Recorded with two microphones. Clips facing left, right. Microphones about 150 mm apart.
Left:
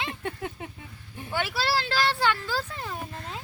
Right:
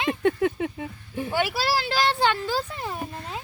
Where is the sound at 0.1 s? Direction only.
90° right.